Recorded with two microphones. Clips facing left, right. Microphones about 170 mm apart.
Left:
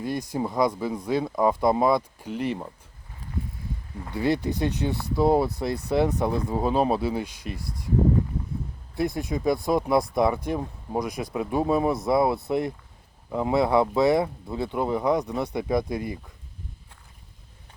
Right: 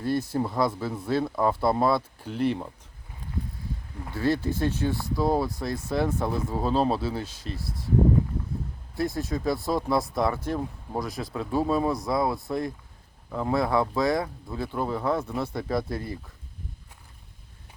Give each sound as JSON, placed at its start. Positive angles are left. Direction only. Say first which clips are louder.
{"t": 0.0, "sound": "speech", "louder": "right 1 dB", "side_deg": 15}
{"t": 4.1, "sound": "speech", "louder": "left 1 dB", "side_deg": 20}
{"t": 9.0, "sound": "speech", "louder": "left 1 dB", "side_deg": 20}